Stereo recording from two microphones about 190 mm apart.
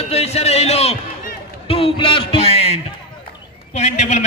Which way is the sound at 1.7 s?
30° left (ahead or behind).